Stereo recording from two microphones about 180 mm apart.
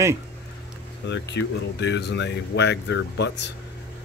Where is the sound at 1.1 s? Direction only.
75° left (ahead or behind).